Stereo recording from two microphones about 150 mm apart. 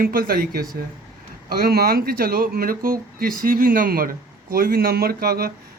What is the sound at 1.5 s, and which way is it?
Speech, 90° right.